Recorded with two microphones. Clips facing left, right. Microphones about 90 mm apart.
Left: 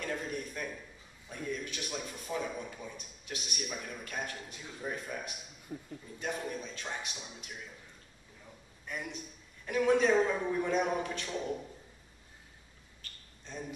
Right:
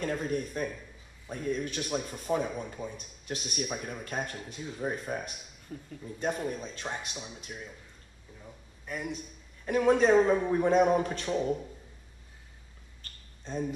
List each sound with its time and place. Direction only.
0.0 s a sound: 35° right (ahead or behind)
1.3 s a man's voice: 35° right (ahead or behind)
5.7 s speech: 10° left (ahead or behind)
6.4 s a man's voice: 35° right (ahead or behind)
8.8 s a man's voice: 5° right (ahead or behind)
9.7 s a man's voice: 40° right (ahead or behind)
11.2 s a man's voice: 15° right (ahead or behind)
13.0 s a sound: 35° right (ahead or behind)